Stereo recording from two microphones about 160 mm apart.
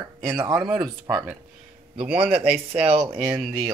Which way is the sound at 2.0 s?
10° right (ahead or behind).